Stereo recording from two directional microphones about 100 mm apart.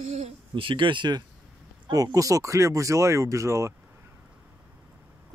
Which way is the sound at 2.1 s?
35° right (ahead or behind).